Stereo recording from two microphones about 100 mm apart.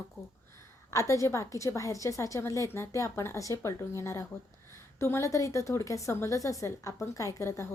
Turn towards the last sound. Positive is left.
turn(degrees=30)  # may be behind; listen again after turning